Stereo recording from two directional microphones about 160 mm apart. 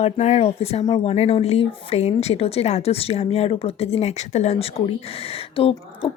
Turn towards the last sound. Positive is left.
turn(degrees=35)  # may be behind; listen again after turning